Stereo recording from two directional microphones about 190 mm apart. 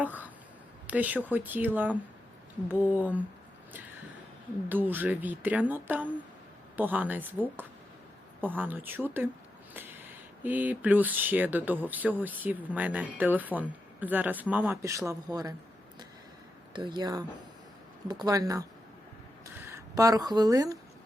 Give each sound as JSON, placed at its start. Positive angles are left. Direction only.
{"t": 0.0, "sound": "a sound", "side_deg": -10}
{"t": 0.9, "sound": "speech", "side_deg": -10}
{"t": 4.7, "sound": "speech", "side_deg": -10}
{"t": 9.7, "sound": "a sound", "side_deg": -10}
{"t": 10.4, "sound": "speech", "side_deg": -10}
{"t": 16.7, "sound": "speech", "side_deg": -25}
{"t": 19.7, "sound": "a woman's voice", "side_deg": -20}